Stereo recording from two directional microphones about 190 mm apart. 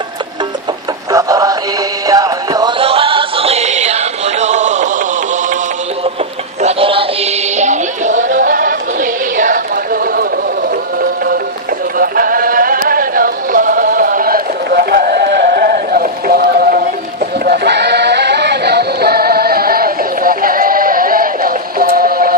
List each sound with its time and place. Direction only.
1.1 s synthetic singing: 20° right (ahead or behind)
2.0 s music: 20° right (ahead or behind); by 4.9 s 40° right (ahead or behind)
6.6 s music: 30° right (ahead or behind); by 10.2 s 50° right (ahead or behind)
11.9 s music: 50° right (ahead or behind)
17.4 s synthetic singing: 55° right (ahead or behind)